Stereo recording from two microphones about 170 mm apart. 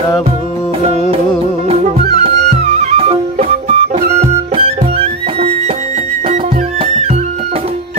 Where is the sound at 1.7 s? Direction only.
40° right (ahead or behind).